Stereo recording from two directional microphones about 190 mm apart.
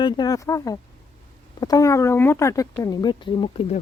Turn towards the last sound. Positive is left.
turn(degrees=25)  # may be behind; listen again after turning